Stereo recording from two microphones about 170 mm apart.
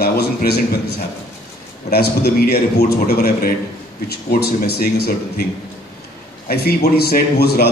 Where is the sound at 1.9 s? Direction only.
65° left (ahead or behind).